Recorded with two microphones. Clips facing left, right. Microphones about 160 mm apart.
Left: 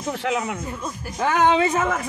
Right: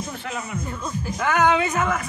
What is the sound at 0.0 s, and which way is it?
Speech, 80° left.